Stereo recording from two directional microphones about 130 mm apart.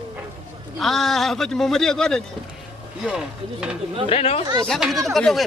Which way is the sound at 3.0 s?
5° right (ahead or behind).